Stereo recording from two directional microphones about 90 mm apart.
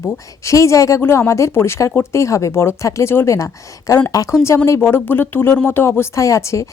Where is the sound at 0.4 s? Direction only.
35° left (ahead or behind).